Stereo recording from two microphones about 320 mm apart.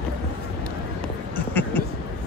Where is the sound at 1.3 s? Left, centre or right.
Centre.